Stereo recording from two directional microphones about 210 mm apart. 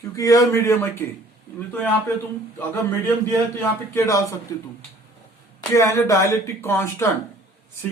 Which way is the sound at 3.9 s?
15° left (ahead or behind).